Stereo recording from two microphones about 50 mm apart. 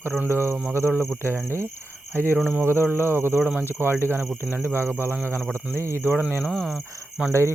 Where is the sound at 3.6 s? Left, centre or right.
Right.